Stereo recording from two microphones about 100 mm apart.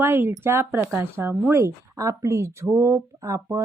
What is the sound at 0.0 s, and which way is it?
A woman's voice, 25° right (ahead or behind).